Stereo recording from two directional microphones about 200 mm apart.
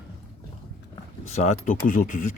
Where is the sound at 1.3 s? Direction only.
35° left (ahead or behind).